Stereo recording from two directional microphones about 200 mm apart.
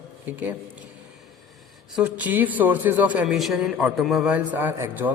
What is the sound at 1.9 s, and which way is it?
A man's voice, 5° right (ahead or behind).